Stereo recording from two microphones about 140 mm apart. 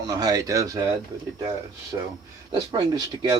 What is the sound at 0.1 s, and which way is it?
Speech, 25° right (ahead or behind).